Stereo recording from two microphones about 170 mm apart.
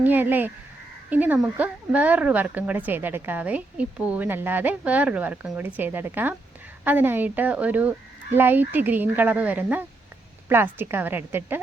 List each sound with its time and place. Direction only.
0.0 s speech: 10° right (ahead or behind)